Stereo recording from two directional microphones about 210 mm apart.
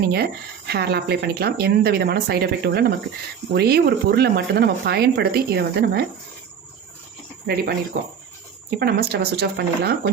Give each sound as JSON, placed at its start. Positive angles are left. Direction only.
{"t": 0.7, "sound": "speech", "side_deg": -50}
{"t": 7.4, "sound": "speech", "side_deg": -45}